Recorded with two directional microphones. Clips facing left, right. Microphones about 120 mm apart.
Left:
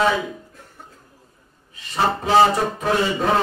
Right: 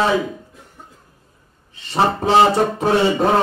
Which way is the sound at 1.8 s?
30° right (ahead or behind).